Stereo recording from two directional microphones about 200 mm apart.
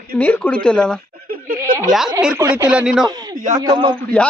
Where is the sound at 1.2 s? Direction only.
45° right (ahead or behind).